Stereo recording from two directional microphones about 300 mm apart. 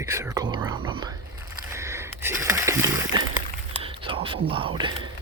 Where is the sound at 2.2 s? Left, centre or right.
Centre.